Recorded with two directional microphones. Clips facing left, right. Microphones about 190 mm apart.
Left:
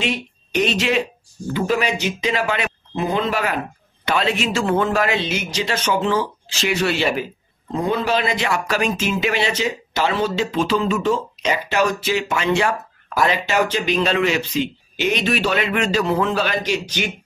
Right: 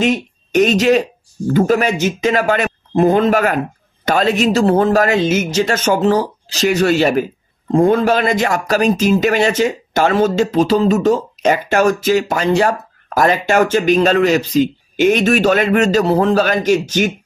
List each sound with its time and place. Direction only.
0.0 s speech: 45° right (ahead or behind)